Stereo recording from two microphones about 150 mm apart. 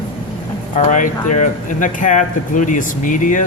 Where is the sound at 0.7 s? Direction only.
55° left (ahead or behind).